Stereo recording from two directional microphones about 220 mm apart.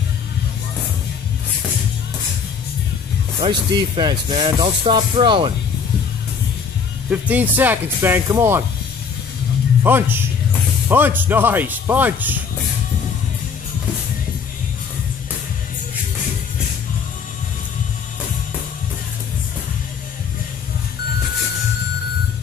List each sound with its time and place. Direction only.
3.3 s speech: 25° right (ahead or behind)
7.1 s speech: 5° right (ahead or behind)
9.8 s speech: 10° right (ahead or behind)